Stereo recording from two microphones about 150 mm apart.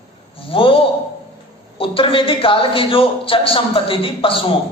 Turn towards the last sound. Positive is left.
turn(degrees=35)  # may be behind; listen again after turning